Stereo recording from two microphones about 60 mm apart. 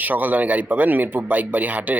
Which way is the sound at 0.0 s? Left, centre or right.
Right.